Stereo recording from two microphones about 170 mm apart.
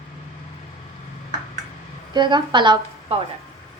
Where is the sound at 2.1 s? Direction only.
25° right (ahead or behind).